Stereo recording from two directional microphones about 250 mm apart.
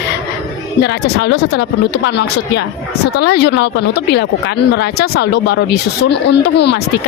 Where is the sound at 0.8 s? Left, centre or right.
Left.